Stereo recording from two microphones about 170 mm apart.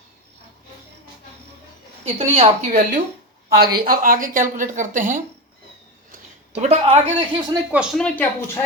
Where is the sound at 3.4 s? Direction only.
65° right (ahead or behind).